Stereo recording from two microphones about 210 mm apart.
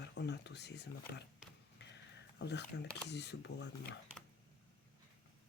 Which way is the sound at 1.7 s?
55° left (ahead or behind).